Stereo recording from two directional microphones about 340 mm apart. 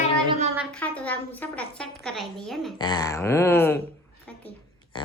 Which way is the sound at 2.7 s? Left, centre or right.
Centre.